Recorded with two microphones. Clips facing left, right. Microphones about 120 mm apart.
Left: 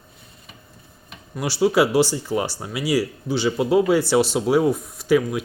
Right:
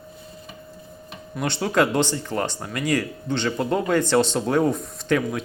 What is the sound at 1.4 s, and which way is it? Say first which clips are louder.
Speech: left 3 dB; 5° left (ahead or behind).